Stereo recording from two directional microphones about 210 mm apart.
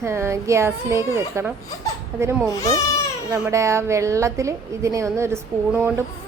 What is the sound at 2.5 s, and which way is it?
Speech, 15° left (ahead or behind).